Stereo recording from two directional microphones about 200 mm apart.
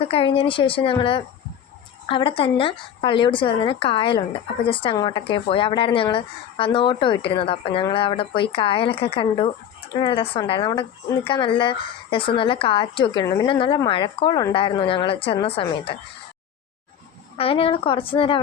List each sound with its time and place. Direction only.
0.0 s a woman's voice: 25° left (ahead or behind)
17.3 s a woman's voice: 30° left (ahead or behind)